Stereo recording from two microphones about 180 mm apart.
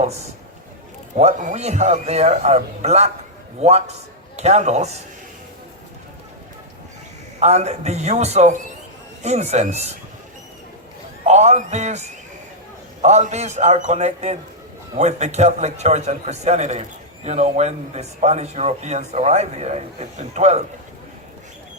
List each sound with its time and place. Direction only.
0.0 s speech: 35° right (ahead or behind)
7.3 s speech: 40° right (ahead or behind)
11.3 s speech: 40° right (ahead or behind)